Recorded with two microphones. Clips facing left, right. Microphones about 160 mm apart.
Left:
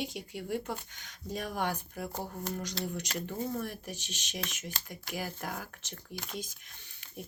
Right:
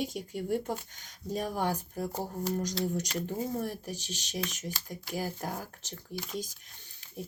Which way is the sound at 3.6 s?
35° right (ahead or behind).